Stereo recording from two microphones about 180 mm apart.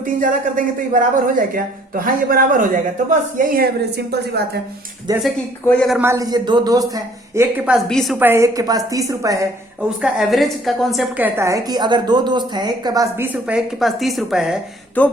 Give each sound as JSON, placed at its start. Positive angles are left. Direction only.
{"t": 0.0, "sound": "speech", "side_deg": -50}
{"t": 5.1, "sound": "a woman's voice", "side_deg": -20}
{"t": 5.6, "sound": "a woman's voice", "side_deg": 5}
{"t": 6.0, "sound": "a woman's voice", "side_deg": -15}
{"t": 8.2, "sound": "a woman's voice", "side_deg": -15}
{"t": 10.0, "sound": "a woman's voice", "side_deg": 0}
{"t": 11.2, "sound": "a woman's voice", "side_deg": -15}
{"t": 15.0, "sound": "speech", "side_deg": 10}